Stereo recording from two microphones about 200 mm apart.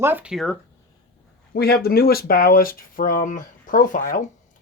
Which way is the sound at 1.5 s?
50° left (ahead or behind).